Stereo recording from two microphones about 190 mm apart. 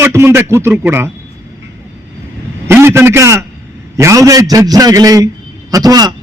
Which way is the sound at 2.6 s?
15° right (ahead or behind).